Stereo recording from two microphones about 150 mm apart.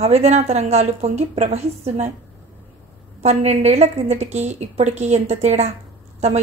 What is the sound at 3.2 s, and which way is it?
Speech, 45° right (ahead or behind).